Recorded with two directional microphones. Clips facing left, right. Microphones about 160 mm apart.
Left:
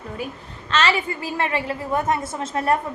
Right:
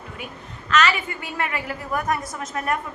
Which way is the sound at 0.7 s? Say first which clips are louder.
Even; 30° left (ahead or behind).